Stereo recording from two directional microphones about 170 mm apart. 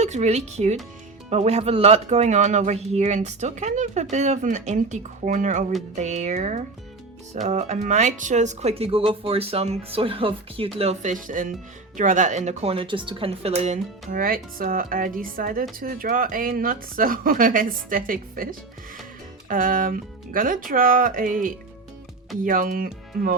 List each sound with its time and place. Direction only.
0.0 s speech: 40° right (ahead or behind)
19.5 s speech: 55° right (ahead or behind)